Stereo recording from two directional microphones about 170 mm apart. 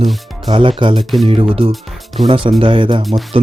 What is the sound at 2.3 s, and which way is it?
Speech, 30° right (ahead or behind).